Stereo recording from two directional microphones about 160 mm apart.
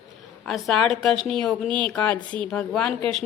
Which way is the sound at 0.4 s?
Centre (ahead or behind).